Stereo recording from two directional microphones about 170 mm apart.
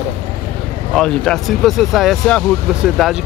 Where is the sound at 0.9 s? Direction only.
5° left (ahead or behind).